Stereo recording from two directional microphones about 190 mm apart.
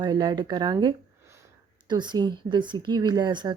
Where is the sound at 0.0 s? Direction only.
25° right (ahead or behind).